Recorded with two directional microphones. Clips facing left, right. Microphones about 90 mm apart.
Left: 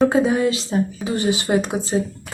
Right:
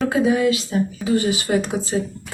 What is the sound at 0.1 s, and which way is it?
Speech, 30° left (ahead or behind).